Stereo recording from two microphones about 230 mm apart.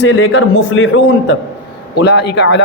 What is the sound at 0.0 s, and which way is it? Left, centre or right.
A man's voice, left.